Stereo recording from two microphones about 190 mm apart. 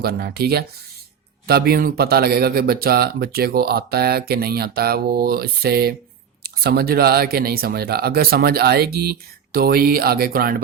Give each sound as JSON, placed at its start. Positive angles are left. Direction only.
{"t": 0.0, "sound": "speech", "side_deg": -55}